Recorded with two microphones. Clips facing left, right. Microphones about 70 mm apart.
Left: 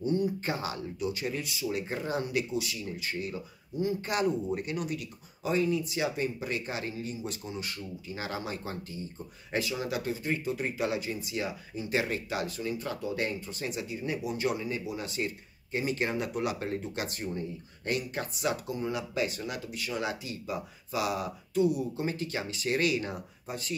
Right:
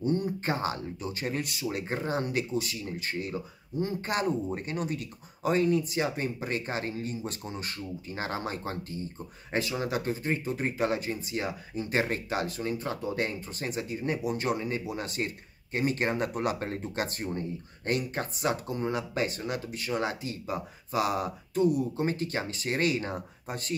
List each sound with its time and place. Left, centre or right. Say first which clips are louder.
0.0 s speech: even; right